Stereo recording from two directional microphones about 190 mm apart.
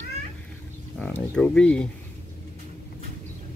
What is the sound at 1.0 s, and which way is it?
Speech, 5° left (ahead or behind).